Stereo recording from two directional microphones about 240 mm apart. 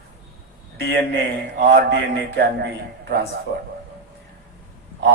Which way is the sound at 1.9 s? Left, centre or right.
Right.